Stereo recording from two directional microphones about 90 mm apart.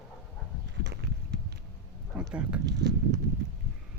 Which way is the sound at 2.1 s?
15° right (ahead or behind).